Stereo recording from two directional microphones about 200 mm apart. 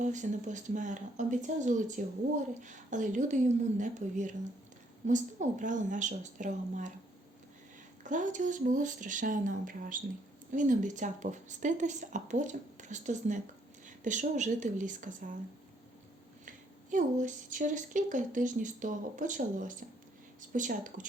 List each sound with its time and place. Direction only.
0.0 s speech: 40° right (ahead or behind)
8.0 s speech: 40° right (ahead or behind)
16.5 s speech: 40° right (ahead or behind)